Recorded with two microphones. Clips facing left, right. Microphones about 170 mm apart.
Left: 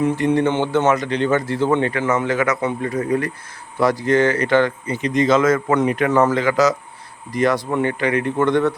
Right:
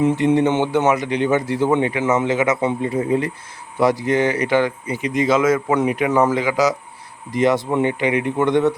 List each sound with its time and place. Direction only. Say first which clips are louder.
0.0 s speech: right 1 dB; 20° right (ahead or behind)
7.3 s speech: right 1 dB; 20° right (ahead or behind)